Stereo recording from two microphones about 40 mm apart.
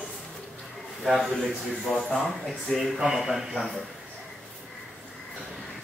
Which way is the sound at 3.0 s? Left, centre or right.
Centre.